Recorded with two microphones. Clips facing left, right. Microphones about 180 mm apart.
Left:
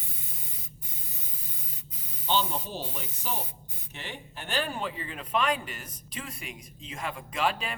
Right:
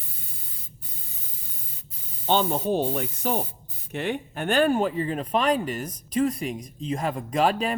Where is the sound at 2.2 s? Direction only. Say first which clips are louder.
Right 6 dB; 50° right (ahead or behind).